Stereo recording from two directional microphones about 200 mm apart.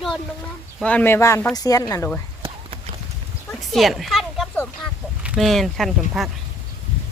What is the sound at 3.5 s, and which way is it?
Speech, centre (ahead or behind).